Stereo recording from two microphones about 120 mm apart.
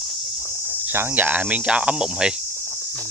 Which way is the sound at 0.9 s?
20° right (ahead or behind).